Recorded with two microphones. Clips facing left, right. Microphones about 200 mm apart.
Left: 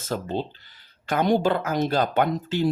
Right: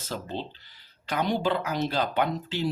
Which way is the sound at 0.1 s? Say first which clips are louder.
Left 6 dB; 45° left (ahead or behind).